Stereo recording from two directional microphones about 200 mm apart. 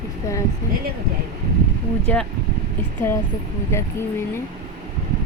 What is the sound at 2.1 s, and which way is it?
Speech, 5° left (ahead or behind).